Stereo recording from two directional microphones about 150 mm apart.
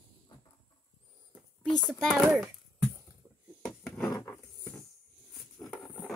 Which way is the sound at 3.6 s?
Centre (ahead or behind).